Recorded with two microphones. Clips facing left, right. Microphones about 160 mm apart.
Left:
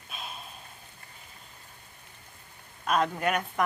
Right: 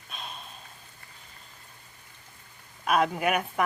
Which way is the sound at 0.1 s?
5° left (ahead or behind).